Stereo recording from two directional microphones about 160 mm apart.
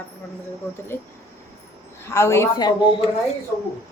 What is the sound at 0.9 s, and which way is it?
A woman's voice, 15° left (ahead or behind).